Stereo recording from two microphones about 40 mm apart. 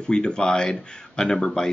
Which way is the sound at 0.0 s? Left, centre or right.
Centre.